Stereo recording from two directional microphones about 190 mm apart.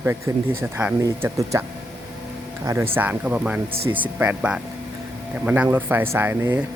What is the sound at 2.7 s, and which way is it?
Speech, 15° right (ahead or behind).